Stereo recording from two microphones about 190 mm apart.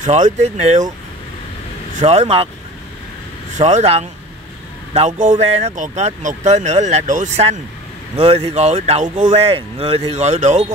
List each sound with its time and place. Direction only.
0.0 s speech: 40° right (ahead or behind)
2.0 s speech: 35° right (ahead or behind)
3.5 s speech: 35° right (ahead or behind)